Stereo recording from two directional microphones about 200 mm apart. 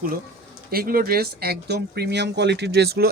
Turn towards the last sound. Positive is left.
turn(degrees=-50)  # may be behind; listen again after turning